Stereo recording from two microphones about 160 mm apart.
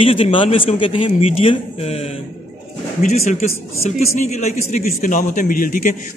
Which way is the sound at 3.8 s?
45° left (ahead or behind).